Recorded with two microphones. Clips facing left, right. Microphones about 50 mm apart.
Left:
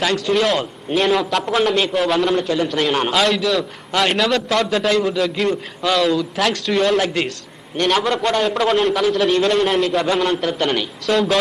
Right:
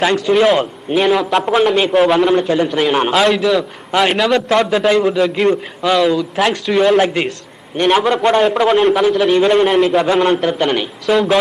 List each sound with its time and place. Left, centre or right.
0.0 s a man's voice: centre
4.4 s a man's voice: centre
10.2 s a man's voice: right
10.6 s a man's voice: centre